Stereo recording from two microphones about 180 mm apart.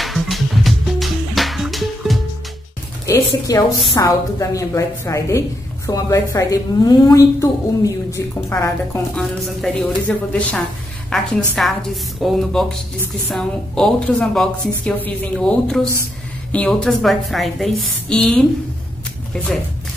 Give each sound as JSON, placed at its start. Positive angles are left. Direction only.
{"t": 0.0, "sound": "music", "side_deg": 0}
{"t": 3.1, "sound": "a woman's voice", "side_deg": 20}